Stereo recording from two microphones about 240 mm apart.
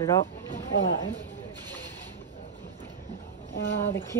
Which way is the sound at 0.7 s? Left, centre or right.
Left.